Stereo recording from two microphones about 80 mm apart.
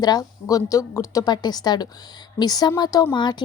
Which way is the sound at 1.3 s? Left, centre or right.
Left.